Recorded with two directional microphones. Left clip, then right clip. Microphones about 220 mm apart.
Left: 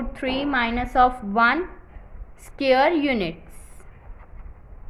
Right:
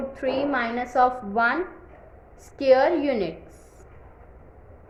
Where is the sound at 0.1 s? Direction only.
30° left (ahead or behind).